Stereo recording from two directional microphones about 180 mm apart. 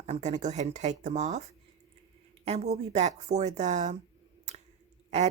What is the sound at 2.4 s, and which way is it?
Speech, 35° right (ahead or behind).